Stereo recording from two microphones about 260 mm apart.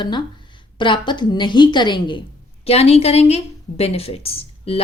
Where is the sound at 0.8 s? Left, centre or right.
Centre.